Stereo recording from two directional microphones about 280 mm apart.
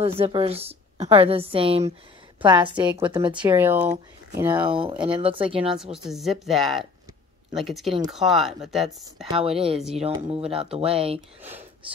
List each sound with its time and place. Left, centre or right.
0.0 s a woman's voice: right
4.6 s a woman's voice: centre
5.6 s speech: centre
9.3 s a woman's voice: centre